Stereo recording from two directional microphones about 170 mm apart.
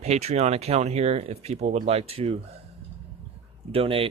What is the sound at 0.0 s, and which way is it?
Speech, 40° right (ahead or behind).